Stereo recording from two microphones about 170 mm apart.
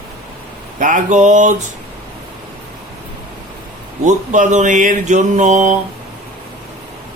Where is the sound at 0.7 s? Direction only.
50° right (ahead or behind).